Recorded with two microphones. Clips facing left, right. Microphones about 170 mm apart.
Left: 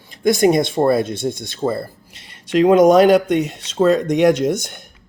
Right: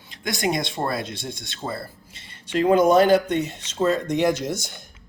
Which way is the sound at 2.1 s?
80° left.